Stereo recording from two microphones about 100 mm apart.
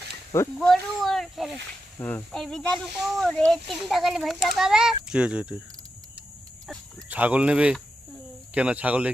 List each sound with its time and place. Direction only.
0.3 s insect: 30° left (ahead or behind)
0.7 s speech: centre (ahead or behind)
2.0 s insect: 20° left (ahead or behind)
2.3 s a child's voice: 5° left (ahead or behind); by 5.5 s 10° right (ahead or behind)
7.1 s speech: 15° right (ahead or behind)